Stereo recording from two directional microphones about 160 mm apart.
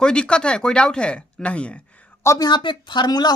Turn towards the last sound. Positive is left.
turn(degrees=25)  # may be behind; listen again after turning